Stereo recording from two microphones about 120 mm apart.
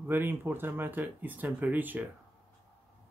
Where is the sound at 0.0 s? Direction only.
15° right (ahead or behind).